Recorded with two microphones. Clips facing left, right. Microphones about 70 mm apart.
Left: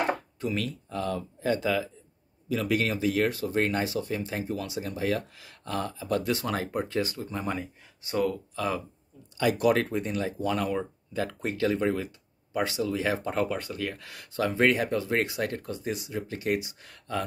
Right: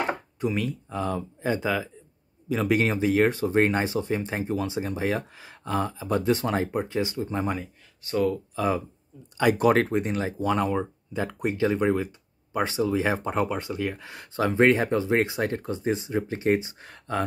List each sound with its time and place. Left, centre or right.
0.1 s speech: right
2.5 s speech: right
8.5 s speech: right
9.4 s speech: right